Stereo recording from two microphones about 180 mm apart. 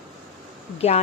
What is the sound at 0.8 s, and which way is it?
Speech, 35° left (ahead or behind).